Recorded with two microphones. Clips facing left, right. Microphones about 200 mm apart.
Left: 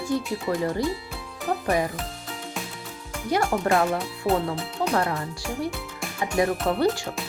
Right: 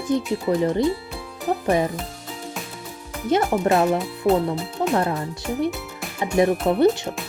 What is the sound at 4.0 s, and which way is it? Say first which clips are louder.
Speech: right 5 dB; centre (ahead or behind).